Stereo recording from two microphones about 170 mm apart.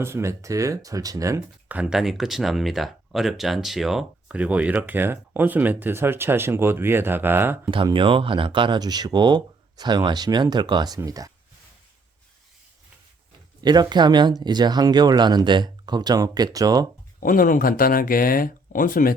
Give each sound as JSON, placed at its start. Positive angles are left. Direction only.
{"t": 0.0, "sound": "speech", "side_deg": -15}
{"t": 7.7, "sound": "speech", "side_deg": -30}
{"t": 13.6, "sound": "speech", "side_deg": -25}
{"t": 17.2, "sound": "speech", "side_deg": 55}